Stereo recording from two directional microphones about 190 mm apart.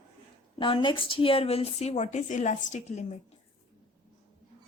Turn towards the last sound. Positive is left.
turn(degrees=35)  # may be behind; listen again after turning